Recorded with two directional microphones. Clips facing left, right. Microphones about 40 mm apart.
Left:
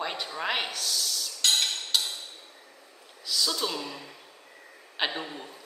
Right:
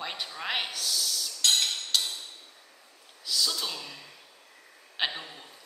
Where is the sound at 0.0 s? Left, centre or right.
Centre.